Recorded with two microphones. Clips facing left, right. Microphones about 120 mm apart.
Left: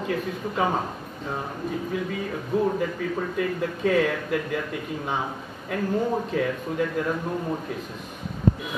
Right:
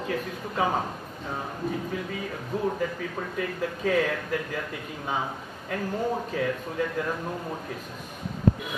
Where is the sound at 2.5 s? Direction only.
15° left (ahead or behind).